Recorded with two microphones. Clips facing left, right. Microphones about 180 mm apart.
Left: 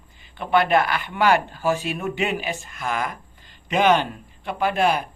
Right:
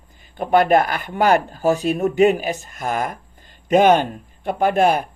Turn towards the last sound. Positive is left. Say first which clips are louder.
# right 4 dB
turn(degrees=-50)  # may be behind; listen again after turning